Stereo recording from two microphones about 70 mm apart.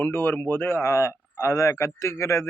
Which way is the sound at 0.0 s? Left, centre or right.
Left.